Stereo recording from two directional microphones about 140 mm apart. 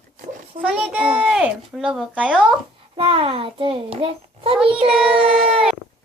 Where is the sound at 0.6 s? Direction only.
5° right (ahead or behind).